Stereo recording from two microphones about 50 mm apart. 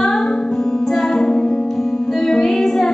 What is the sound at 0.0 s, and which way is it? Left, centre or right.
Music, centre.